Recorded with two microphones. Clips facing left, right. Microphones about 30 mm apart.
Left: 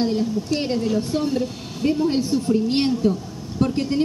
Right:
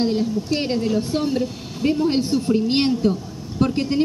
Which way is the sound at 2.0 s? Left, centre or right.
Right.